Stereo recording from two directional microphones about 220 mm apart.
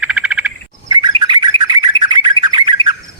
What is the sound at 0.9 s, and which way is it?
Bird, 20° right (ahead or behind).